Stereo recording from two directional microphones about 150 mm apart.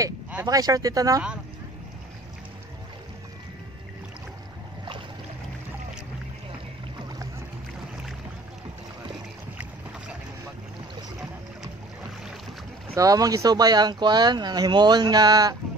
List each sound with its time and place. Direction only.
0.5 s speech: 25° right (ahead or behind)
12.9 s speech: 25° right (ahead or behind)